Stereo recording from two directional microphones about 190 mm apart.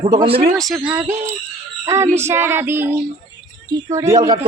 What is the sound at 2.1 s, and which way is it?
Music, 10° right (ahead or behind).